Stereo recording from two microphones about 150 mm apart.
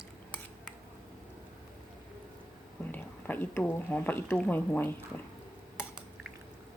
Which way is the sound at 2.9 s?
15° left (ahead or behind).